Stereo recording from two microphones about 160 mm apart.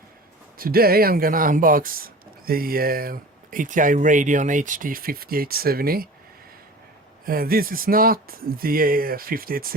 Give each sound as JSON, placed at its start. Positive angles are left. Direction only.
{"t": 0.6, "sound": "speech", "side_deg": -70}
{"t": 7.3, "sound": "speech", "side_deg": -65}